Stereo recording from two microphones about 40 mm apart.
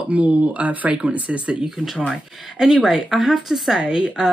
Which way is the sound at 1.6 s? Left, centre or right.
Centre.